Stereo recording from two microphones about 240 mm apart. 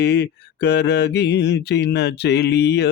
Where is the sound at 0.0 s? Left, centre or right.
Left.